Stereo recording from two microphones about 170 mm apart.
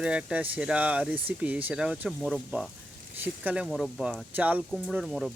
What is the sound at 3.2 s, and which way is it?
Speech, 10° right (ahead or behind).